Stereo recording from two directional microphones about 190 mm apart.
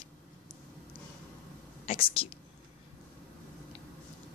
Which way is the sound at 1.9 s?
30° left (ahead or behind).